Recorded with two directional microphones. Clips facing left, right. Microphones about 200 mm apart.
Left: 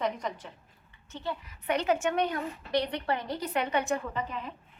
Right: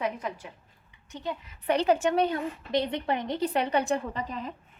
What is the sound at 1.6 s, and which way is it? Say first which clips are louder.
A woman's voice: right 4 dB; 35° right (ahead or behind).